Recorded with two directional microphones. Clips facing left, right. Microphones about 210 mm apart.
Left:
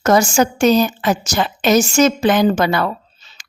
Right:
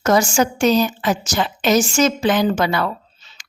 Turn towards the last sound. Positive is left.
turn(degrees=35)  # may be behind; listen again after turning